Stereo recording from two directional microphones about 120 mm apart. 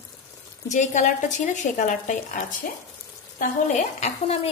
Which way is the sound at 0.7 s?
90° left.